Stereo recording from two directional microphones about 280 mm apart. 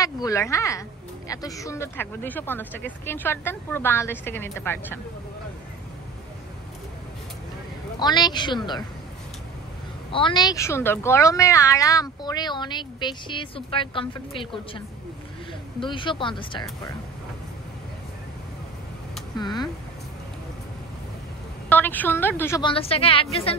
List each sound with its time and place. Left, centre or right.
0.0 s a woman's voice: centre
8.0 s a woman's voice: centre
10.1 s a woman's voice: centre
15.8 s a woman's voice: centre
19.3 s speech: centre
21.6 s a woman's voice: centre